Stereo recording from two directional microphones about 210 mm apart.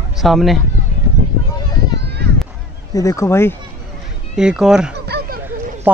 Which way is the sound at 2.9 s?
15° left (ahead or behind).